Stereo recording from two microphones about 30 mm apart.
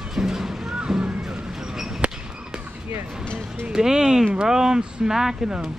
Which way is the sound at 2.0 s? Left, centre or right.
Right.